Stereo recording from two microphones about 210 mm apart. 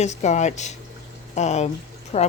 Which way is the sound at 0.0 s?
35° left (ahead or behind).